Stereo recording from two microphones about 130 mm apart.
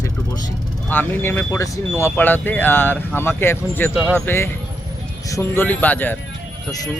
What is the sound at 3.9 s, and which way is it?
Speech, 10° right (ahead or behind).